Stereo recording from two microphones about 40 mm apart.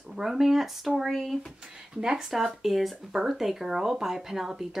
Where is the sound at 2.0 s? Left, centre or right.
Centre.